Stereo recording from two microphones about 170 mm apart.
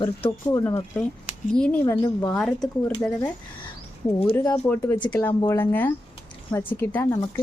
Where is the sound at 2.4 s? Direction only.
Centre (ahead or behind).